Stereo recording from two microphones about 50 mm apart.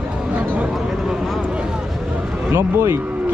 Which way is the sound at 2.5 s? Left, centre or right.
Right.